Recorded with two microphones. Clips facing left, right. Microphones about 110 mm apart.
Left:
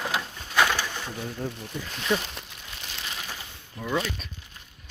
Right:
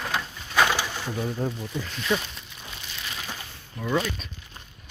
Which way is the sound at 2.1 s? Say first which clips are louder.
Even; centre (ahead or behind).